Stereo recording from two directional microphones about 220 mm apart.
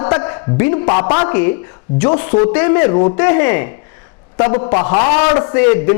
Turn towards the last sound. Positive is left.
turn(degrees=15)  # may be behind; listen again after turning